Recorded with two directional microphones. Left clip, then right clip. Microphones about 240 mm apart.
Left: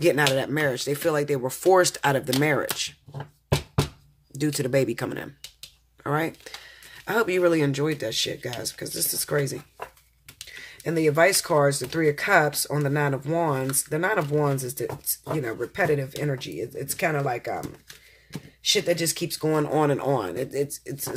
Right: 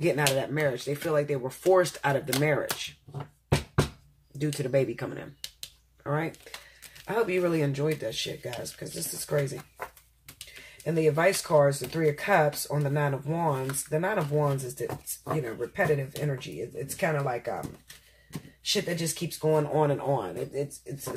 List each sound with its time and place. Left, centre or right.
0.0 s speech: left
4.4 s speech: left
10.8 s speech: left
18.6 s speech: left